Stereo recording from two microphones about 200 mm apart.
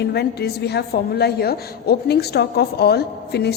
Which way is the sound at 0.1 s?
55° left (ahead or behind).